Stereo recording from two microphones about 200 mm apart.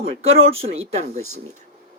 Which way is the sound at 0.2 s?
30° right (ahead or behind).